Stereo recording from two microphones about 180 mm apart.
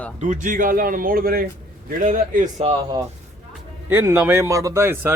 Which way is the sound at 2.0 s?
45° right (ahead or behind).